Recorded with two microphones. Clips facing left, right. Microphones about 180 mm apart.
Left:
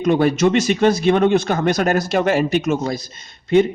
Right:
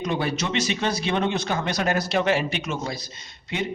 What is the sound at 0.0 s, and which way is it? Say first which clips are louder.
A man's voice: left 11 dB; 50° left (ahead or behind).